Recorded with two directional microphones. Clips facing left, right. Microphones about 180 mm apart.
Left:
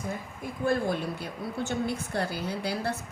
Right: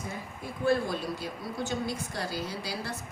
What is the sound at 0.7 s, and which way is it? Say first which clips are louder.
A woman's voice: even; 55° left (ahead or behind).